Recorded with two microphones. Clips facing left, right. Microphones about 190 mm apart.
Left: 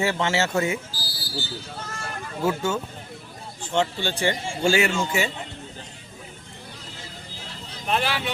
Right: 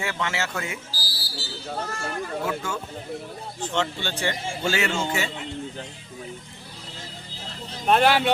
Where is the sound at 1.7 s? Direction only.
60° right (ahead or behind).